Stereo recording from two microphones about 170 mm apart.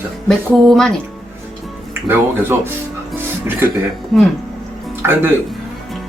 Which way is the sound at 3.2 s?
15° right (ahead or behind).